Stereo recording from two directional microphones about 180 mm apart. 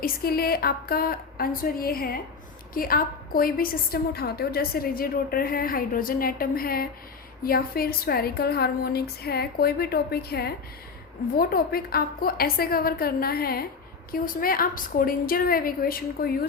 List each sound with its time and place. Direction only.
0.0 s a woman's voice: 55° left (ahead or behind)